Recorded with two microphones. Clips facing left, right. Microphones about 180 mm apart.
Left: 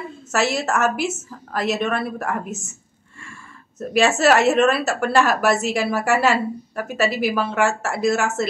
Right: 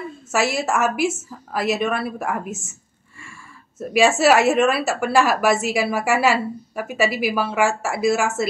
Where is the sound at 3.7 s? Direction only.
10° right (ahead or behind).